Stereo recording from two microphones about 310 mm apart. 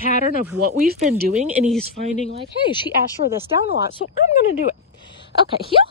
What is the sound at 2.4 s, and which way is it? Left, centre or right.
Speech, centre.